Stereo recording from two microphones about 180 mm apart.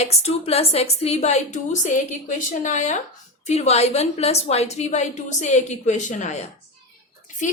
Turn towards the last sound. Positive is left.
turn(degrees=45)  # may be behind; listen again after turning